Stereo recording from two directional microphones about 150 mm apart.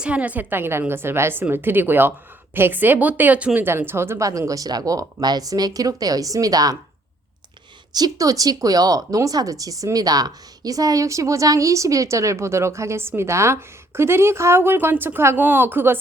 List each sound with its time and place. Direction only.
0.0 s a woman's voice: 10° right (ahead or behind); by 6.7 s 25° right (ahead or behind)
7.9 s speech: 25° right (ahead or behind)